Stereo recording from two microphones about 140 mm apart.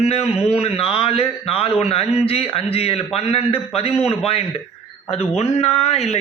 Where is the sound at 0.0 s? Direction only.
50° left (ahead or behind).